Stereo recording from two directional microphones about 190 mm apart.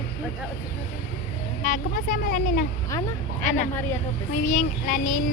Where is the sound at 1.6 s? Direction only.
45° left (ahead or behind).